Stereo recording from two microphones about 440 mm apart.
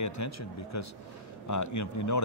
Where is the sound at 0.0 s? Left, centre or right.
Left.